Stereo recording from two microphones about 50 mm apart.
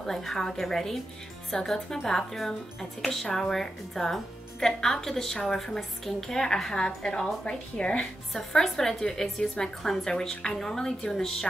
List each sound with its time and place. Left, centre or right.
0.0 s speech: centre
8.3 s speech: centre